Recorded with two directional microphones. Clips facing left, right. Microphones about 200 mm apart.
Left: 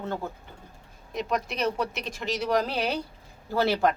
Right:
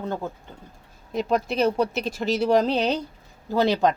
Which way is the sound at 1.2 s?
30° right (ahead or behind).